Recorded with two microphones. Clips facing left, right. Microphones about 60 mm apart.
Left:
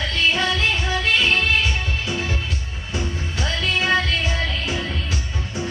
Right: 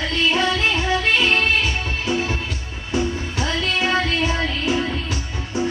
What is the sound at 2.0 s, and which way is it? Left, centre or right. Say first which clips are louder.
Music: right 3 dB; right.